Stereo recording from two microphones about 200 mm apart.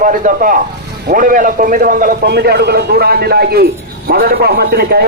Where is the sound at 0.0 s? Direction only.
40° right (ahead or behind).